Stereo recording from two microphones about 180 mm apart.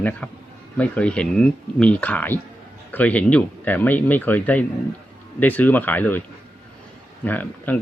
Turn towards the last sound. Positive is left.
turn(degrees=10)  # may be behind; listen again after turning